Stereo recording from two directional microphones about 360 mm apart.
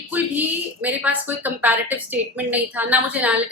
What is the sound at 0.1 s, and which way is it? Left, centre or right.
A woman's voice, centre.